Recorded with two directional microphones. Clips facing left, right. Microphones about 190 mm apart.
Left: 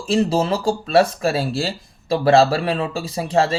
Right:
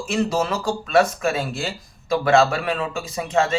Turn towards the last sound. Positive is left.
turn(degrees=35)  # may be behind; listen again after turning